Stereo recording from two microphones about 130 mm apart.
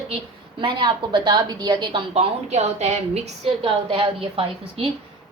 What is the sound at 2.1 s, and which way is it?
A woman's voice, 55° right (ahead or behind).